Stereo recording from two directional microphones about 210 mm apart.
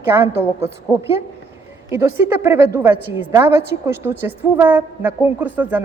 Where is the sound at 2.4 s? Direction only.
10° right (ahead or behind).